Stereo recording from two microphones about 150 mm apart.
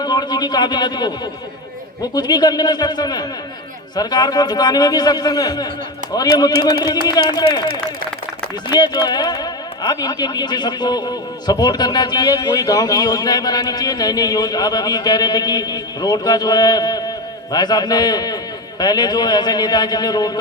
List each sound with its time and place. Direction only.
0.0 s speech: 30° left (ahead or behind)
8.7 s speech: 25° left (ahead or behind)